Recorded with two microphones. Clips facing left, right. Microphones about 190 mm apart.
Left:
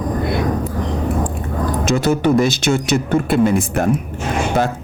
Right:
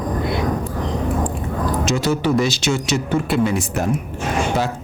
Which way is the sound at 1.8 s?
55° left (ahead or behind).